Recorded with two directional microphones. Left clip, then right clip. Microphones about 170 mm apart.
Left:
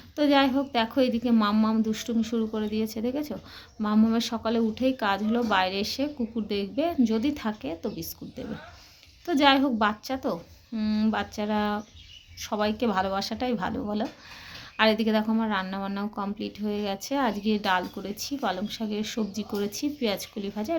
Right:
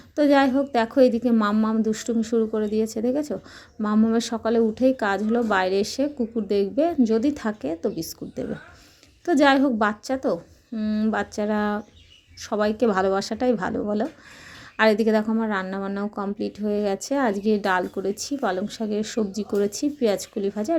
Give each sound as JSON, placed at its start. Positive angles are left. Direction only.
{"t": 0.2, "sound": "a woman's voice", "side_deg": -30}